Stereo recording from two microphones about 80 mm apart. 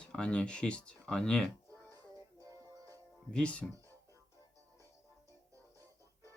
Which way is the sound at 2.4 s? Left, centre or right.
Right.